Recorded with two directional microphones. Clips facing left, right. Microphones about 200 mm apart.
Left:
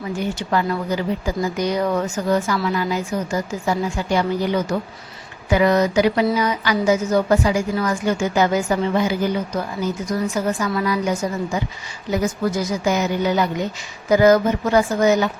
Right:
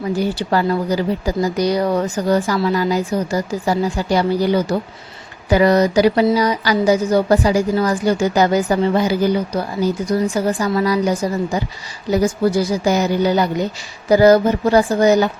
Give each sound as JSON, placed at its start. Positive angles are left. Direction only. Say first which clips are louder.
{"t": 0.1, "sound": "speech", "louder": "right 3 dB", "side_deg": -35}